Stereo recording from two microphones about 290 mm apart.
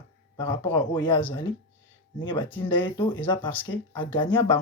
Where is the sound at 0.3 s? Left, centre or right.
Centre.